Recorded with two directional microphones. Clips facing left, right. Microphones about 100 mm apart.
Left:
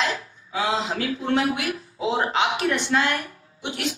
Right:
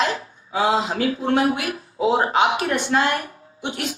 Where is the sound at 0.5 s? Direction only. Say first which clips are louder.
Right 4 dB; 40° right (ahead or behind).